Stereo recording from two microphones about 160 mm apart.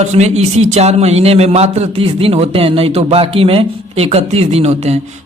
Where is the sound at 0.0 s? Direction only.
45° right (ahead or behind).